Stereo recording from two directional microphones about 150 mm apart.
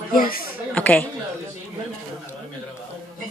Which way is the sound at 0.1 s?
75° left (ahead or behind).